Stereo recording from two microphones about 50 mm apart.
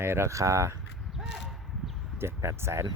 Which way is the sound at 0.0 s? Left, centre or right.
Right.